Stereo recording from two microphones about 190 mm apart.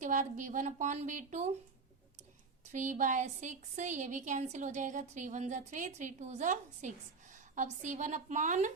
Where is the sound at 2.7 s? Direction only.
40° right (ahead or behind).